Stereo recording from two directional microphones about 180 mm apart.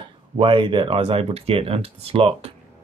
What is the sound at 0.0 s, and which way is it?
Speech, 30° right (ahead or behind).